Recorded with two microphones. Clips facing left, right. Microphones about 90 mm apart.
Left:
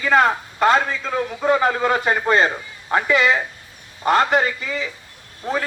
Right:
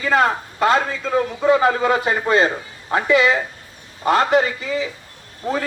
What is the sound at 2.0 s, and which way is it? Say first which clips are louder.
Speech: even; 45° left (ahead or behind).